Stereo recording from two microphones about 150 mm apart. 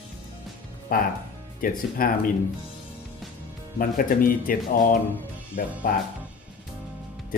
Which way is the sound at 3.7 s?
70° left (ahead or behind).